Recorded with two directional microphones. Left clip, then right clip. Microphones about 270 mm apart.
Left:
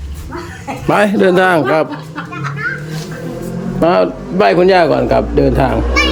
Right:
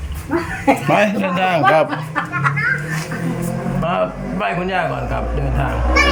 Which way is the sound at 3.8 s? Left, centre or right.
Left.